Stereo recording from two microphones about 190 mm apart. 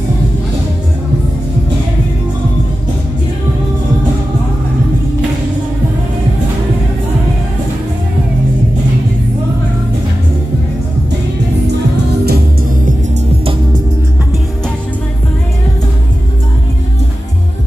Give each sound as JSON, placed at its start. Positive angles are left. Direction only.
{"t": 11.6, "sound": "music", "side_deg": -60}